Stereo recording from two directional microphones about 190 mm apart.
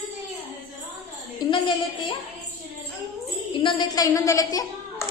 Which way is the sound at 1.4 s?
25° left (ahead or behind).